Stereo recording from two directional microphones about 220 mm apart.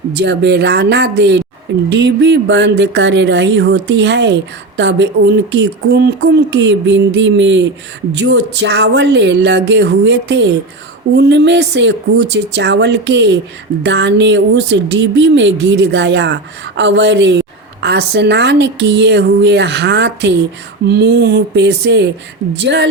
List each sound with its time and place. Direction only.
0.2 s speech: 50° right (ahead or behind)